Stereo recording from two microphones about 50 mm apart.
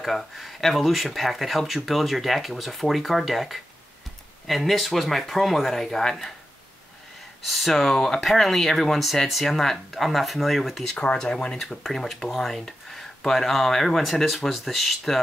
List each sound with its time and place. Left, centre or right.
0.0 s speech: centre
7.4 s speech: centre
11.1 s speech: centre
11.6 s speech: centre